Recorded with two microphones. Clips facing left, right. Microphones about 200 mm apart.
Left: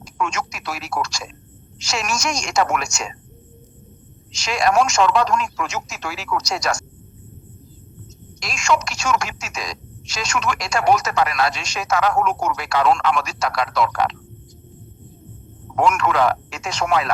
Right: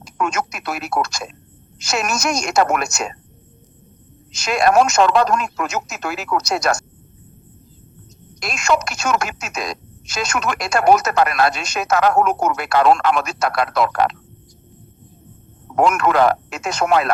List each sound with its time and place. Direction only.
0.2 s speech: 55° right (ahead or behind)
4.3 s speech: 55° right (ahead or behind)
8.4 s speech: 55° right (ahead or behind)
15.7 s speech: 55° right (ahead or behind)